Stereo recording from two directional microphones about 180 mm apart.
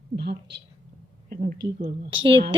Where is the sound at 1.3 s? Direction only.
50° right (ahead or behind).